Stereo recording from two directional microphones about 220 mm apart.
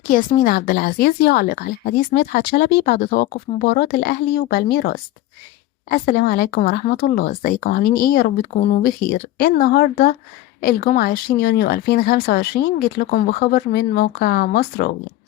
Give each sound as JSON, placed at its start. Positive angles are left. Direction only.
{"t": 0.1, "sound": "a woman's voice", "side_deg": 40}